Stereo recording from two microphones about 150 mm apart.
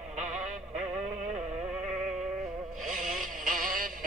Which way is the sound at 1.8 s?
50° right (ahead or behind).